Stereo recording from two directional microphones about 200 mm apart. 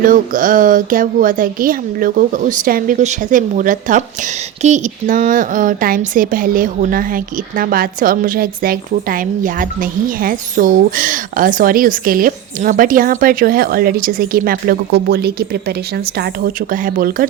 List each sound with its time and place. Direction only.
0.0 s a woman's voice: 45° right (ahead or behind)